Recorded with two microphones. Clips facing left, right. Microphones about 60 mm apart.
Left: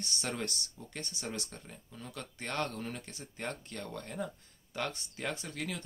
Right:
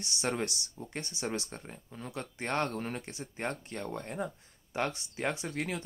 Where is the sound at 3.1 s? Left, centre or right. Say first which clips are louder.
Right 4 dB; right.